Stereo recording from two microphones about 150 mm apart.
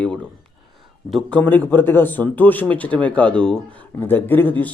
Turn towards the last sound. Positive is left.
turn(degrees=10)  # may be behind; listen again after turning